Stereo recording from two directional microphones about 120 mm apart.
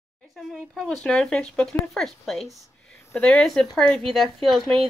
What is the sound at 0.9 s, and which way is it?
Speech, 5° left (ahead or behind).